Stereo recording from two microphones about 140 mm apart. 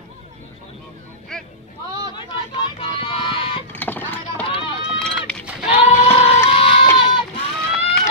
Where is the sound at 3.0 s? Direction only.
35° left (ahead or behind).